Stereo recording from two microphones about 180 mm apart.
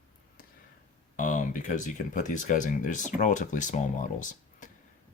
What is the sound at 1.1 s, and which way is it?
Speech, 45° left (ahead or behind).